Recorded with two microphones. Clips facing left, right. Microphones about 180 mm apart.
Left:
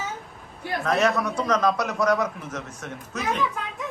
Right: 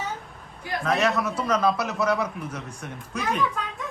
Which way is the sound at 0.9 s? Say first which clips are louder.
Left 1 dB; centre (ahead or behind).